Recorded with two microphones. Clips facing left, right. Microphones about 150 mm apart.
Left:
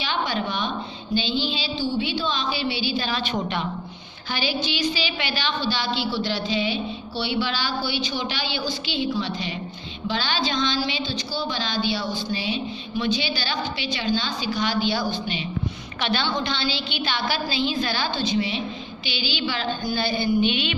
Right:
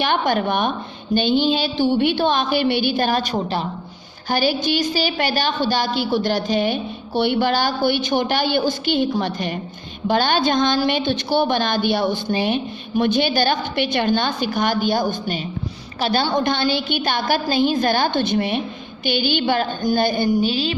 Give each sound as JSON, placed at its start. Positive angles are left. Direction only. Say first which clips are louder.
{"t": 0.0, "sound": "a woman's voice", "louder": "right 7 dB", "side_deg": -55}
{"t": 3.3, "sound": "a woman's voice", "louder": "right 4 dB", "side_deg": -35}
{"t": 4.3, "sound": "a woman's voice", "louder": "right 7 dB", "side_deg": -45}